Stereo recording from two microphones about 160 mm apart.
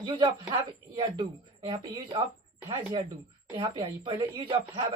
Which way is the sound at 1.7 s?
30° right (ahead or behind).